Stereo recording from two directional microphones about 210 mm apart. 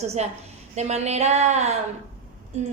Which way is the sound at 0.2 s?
35° right (ahead or behind).